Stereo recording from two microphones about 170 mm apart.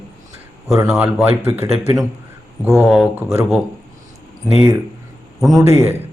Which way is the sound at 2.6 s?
5° right (ahead or behind).